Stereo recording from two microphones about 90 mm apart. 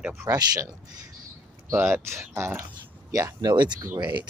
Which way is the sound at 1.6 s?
30° right (ahead or behind).